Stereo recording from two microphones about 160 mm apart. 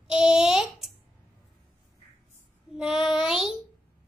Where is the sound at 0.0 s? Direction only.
5° right (ahead or behind).